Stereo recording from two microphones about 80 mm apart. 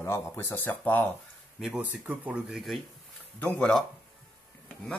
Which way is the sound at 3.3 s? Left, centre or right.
Centre.